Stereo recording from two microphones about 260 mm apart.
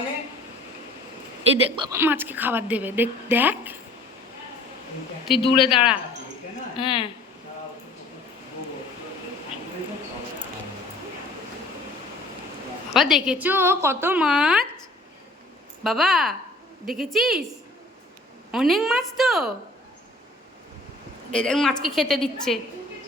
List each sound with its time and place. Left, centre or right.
1.7 s a woman's voice: centre
5.3 s a man's voice: centre
5.6 s a woman's voice: centre
6.7 s a man's voice: centre
12.9 s a woman's voice: centre
15.8 s a woman's voice: centre
18.5 s a woman's voice: centre
21.3 s a woman's voice: centre